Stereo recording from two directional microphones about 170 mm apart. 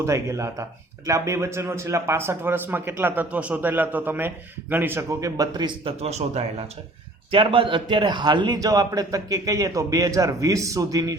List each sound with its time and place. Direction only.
0.0 s a man's voice: 15° right (ahead or behind)